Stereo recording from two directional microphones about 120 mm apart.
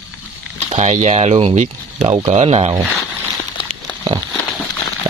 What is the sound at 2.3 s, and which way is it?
Speech, 60° right (ahead or behind).